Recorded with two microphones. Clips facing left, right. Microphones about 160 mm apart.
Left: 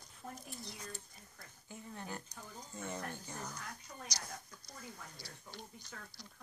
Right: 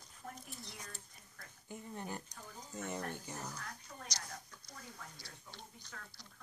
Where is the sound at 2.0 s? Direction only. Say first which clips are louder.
Right 1 dB; 15° right (ahead or behind).